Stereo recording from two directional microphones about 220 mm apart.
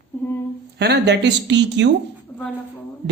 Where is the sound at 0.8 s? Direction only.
50° right (ahead or behind).